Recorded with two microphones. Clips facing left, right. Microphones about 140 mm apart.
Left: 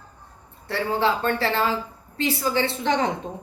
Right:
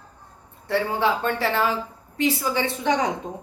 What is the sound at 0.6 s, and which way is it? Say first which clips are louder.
Speech: right 1 dB; 15° right (ahead or behind).